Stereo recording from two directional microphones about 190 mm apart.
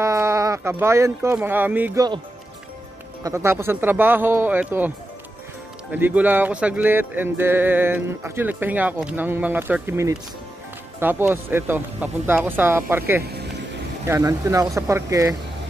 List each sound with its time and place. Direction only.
0.0 s speech: 15° right (ahead or behind)
3.3 s speech: 15° right (ahead or behind)